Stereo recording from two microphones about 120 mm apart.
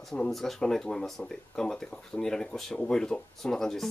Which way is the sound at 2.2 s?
5° left (ahead or behind).